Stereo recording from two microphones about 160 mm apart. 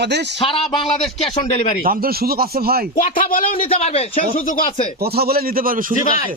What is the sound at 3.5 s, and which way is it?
Speech, 40° left (ahead or behind).